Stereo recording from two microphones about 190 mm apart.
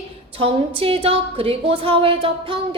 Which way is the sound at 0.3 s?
30° right (ahead or behind).